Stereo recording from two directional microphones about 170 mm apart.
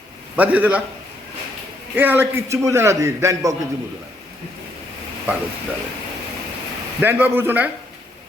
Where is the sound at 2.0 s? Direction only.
10° right (ahead or behind).